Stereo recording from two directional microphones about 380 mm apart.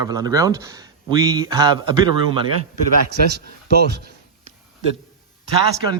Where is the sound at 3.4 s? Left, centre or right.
Right.